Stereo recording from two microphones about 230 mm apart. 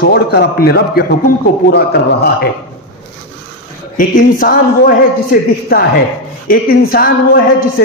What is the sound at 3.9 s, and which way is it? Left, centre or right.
A man's voice, left.